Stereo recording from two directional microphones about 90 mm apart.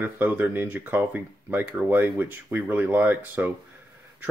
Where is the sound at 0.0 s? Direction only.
20° right (ahead or behind).